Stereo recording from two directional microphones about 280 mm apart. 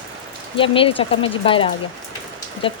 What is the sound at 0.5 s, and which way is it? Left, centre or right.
Speech, centre.